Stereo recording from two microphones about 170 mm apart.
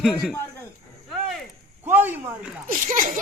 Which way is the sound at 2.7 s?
50° right (ahead or behind).